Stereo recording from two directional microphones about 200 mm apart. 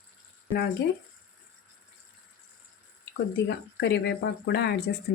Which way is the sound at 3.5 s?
55° left (ahead or behind).